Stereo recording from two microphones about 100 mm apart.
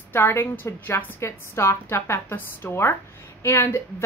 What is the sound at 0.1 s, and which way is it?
A woman's voice, 25° left (ahead or behind).